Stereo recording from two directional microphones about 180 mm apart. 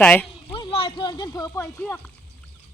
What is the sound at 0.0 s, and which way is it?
Speech, 10° left (ahead or behind).